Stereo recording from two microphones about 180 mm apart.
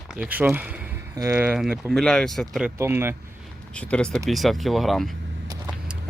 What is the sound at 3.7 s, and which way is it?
Speech, 5° left (ahead or behind).